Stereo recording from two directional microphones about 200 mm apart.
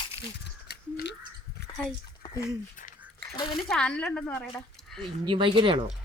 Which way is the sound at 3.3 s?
20° left (ahead or behind).